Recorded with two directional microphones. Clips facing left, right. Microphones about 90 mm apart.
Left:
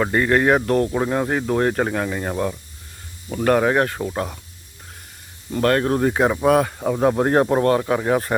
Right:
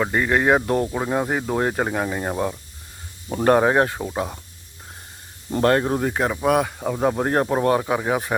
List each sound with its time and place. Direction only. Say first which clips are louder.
0.0 s speech: left 2 dB; 5° right (ahead or behind)
0.9 s speech: left 2 dB; centre (ahead or behind)
3.2 s speech: right 1 dB; 30° right (ahead or behind)
3.9 s speech: left 1 dB; 10° right (ahead or behind)
5.5 s speech: even; 25° right (ahead or behind)
5.8 s speech: left 4 dB; centre (ahead or behind)
7.6 s speech: left 2 dB; 10° right (ahead or behind)